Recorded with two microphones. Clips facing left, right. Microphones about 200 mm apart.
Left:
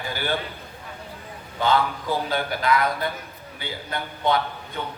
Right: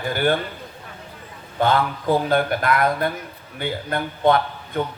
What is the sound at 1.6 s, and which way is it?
A man's voice, 50° right (ahead or behind).